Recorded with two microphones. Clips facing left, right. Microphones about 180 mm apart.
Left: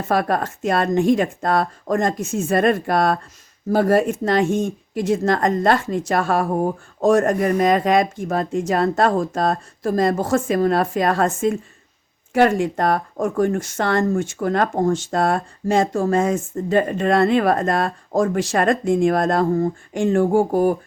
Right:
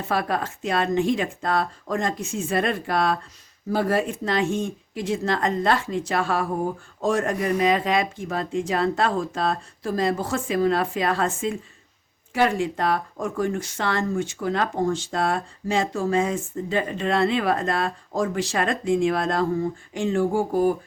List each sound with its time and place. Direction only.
0.0 s speech: 45° left (ahead or behind)